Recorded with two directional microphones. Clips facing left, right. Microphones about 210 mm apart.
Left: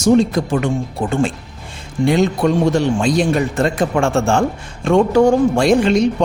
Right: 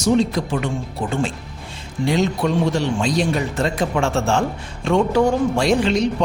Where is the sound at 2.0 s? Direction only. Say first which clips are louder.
Left 4 dB; 50° left (ahead or behind).